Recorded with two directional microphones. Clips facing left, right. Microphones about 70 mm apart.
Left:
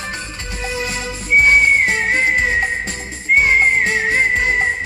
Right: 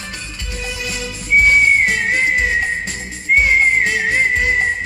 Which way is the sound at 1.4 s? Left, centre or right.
Left.